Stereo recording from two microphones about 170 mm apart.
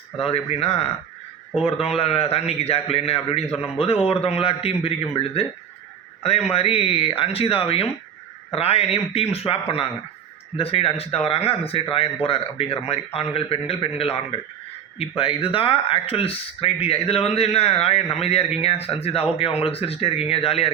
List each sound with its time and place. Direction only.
0.2 s speech: 35° left (ahead or behind)
2.0 s speech: 35° left (ahead or behind)